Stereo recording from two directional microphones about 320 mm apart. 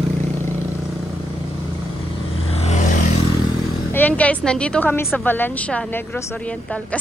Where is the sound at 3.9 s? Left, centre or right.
Centre.